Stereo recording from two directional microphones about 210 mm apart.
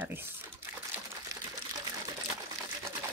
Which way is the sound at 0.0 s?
10° right (ahead or behind).